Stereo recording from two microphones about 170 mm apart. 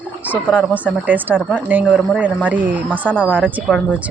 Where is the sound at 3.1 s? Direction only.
5° left (ahead or behind).